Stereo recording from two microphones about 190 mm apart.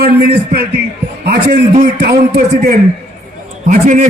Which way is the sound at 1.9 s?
55° right (ahead or behind).